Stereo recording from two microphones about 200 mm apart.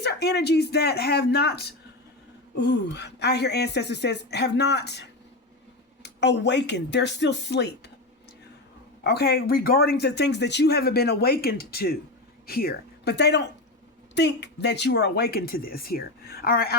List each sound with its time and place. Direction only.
0.0 s speech: 55° left (ahead or behind)
9.0 s speech: 55° left (ahead or behind)